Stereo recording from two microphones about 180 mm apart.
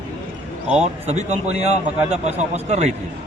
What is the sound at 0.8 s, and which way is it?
A man's voice, 40° right (ahead or behind).